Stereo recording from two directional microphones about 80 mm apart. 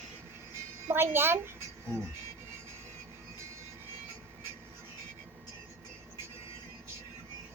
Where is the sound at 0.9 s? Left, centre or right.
Right.